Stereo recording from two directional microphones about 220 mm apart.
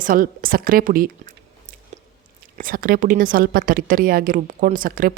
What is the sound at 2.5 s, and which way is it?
A woman's voice, 40° right (ahead or behind).